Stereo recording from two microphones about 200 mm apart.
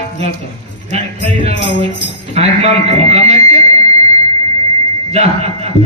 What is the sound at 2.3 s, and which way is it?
Buzzer, 30° right (ahead or behind).